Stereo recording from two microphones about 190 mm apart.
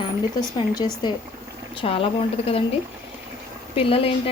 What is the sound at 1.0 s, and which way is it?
Speech, 25° left (ahead or behind).